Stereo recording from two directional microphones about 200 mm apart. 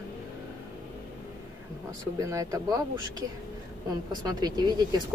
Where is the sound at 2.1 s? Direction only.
15° right (ahead or behind).